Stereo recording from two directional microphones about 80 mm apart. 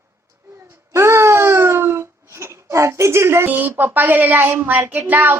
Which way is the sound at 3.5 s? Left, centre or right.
Right.